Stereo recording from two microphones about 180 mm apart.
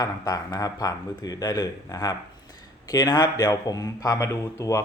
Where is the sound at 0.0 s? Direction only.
20° left (ahead or behind).